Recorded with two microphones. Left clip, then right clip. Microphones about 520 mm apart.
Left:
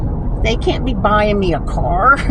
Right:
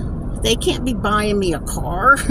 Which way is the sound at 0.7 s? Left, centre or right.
Right.